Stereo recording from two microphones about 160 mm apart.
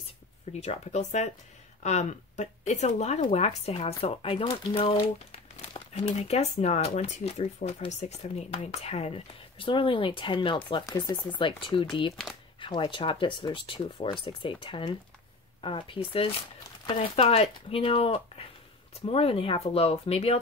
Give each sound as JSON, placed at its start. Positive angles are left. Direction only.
{"t": 0.5, "sound": "speech", "side_deg": 45}